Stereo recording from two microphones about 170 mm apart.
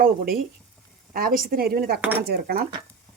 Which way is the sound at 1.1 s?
55° right (ahead or behind).